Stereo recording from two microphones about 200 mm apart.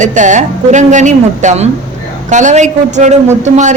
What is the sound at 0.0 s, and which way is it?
Speech, 40° right (ahead or behind).